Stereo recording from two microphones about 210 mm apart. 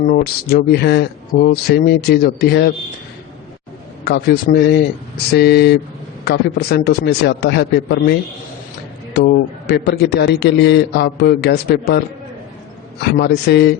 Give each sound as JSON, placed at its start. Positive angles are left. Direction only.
{"t": 0.1, "sound": "a man's voice", "side_deg": 45}
{"t": 4.0, "sound": "a man's voice", "side_deg": 50}
{"t": 9.1, "sound": "a man's voice", "side_deg": 55}